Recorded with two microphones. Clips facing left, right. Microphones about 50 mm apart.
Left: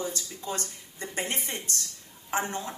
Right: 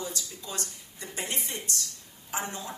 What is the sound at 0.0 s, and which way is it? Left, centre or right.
Speech, left.